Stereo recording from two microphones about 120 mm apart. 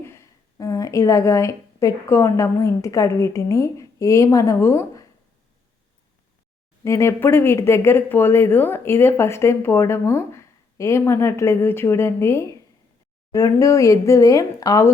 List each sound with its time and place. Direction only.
0.0 s a woman's voice: 25° left (ahead or behind)
6.8 s speech: 25° left (ahead or behind)